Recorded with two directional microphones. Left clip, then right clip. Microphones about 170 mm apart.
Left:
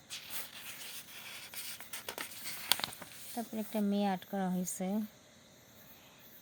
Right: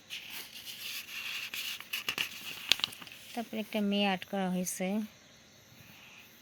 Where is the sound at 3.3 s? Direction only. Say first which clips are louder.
Right 3 dB; 10° right (ahead or behind).